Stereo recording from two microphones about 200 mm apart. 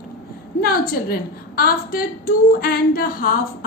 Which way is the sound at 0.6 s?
45° left (ahead or behind).